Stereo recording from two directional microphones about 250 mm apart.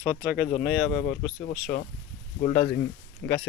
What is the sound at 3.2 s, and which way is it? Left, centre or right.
Speech, left.